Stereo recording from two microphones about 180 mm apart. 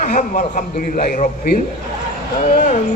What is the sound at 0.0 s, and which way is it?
Speech, 50° left (ahead or behind).